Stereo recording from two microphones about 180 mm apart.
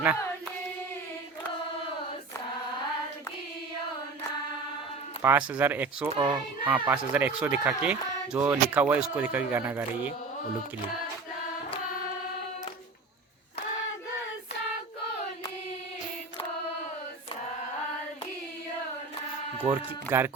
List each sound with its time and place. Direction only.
5.2 s speech: 10° right (ahead or behind)
6.1 s speech: 25° right (ahead or behind)
6.7 s speech: 10° right (ahead or behind)
19.6 s speech: 15° right (ahead or behind)